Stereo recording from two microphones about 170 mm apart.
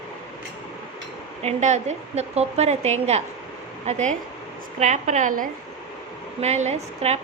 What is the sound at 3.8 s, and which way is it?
Dishes, 45° right (ahead or behind).